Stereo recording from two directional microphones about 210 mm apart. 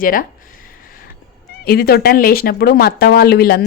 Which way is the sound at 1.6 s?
50° left (ahead or behind).